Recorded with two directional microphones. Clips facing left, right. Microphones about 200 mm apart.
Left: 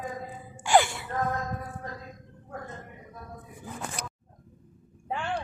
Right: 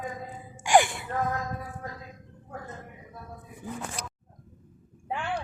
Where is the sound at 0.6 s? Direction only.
15° right (ahead or behind).